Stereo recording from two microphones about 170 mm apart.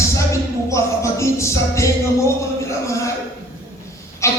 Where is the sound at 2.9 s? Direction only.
15° left (ahead or behind).